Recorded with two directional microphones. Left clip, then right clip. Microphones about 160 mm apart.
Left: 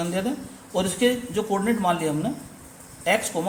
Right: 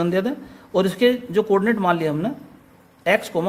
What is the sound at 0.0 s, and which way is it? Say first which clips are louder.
Speech: right 5 dB; 70° right (ahead or behind).